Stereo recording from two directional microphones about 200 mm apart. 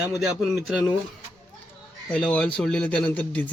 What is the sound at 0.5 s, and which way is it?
Speech, 5° right (ahead or behind).